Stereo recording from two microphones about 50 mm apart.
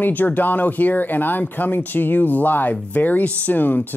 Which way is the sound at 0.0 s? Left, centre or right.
Left.